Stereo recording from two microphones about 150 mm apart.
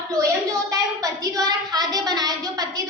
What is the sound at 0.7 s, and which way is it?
A woman's voice, 25° right (ahead or behind).